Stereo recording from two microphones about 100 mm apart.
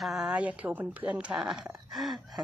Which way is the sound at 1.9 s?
Centre (ahead or behind).